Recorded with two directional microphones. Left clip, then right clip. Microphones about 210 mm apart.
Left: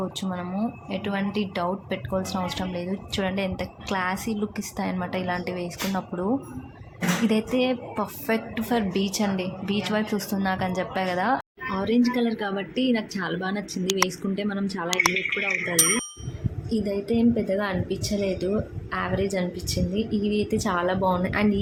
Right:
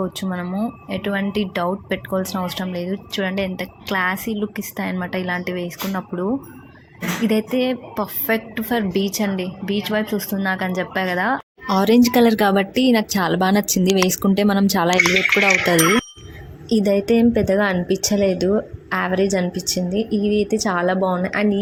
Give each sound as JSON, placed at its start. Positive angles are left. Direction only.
{"t": 0.2, "sound": "a woman's voice", "side_deg": -20}
{"t": 11.7, "sound": "a woman's voice", "side_deg": -55}